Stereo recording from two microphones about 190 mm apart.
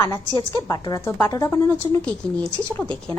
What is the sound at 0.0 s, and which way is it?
A woman's voice, 20° left (ahead or behind).